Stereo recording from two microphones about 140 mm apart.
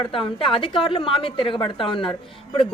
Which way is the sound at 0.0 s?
40° left (ahead or behind).